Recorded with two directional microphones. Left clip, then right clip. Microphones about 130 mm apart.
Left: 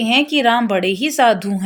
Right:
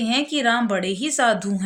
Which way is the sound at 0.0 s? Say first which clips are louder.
Left 6 dB; 25° left (ahead or behind).